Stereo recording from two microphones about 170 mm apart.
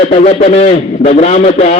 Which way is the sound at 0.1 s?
40° left (ahead or behind).